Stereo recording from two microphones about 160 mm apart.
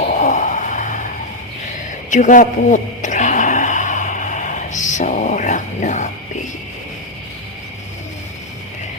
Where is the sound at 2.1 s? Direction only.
55° left (ahead or behind).